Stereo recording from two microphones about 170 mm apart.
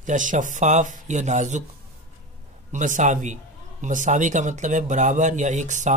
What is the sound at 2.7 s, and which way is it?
Speech, 45° right (ahead or behind).